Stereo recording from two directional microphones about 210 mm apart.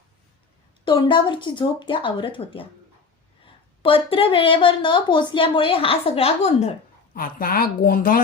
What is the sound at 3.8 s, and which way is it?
A woman's voice, 25° left (ahead or behind).